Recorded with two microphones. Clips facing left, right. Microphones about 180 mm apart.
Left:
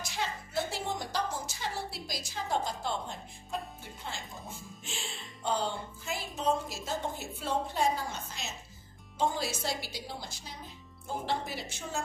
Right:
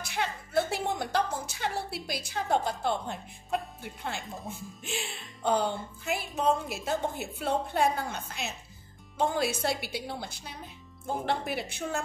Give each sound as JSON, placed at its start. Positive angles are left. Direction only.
{"t": 0.0, "sound": "music", "side_deg": -60}
{"t": 4.0, "sound": "a woman's voice", "side_deg": -60}